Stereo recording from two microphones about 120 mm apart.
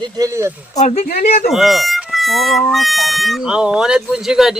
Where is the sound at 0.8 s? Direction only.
65° left (ahead or behind).